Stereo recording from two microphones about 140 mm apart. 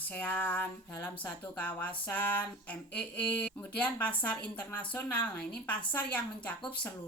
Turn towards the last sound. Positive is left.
turn(degrees=10)  # may be behind; listen again after turning